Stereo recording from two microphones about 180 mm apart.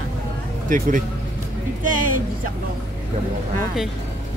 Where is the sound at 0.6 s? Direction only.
45° right (ahead or behind).